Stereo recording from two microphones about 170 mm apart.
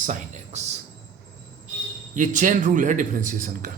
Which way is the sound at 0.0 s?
50° right (ahead or behind).